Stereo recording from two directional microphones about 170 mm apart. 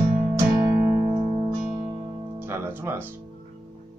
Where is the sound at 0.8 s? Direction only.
20° right (ahead or behind).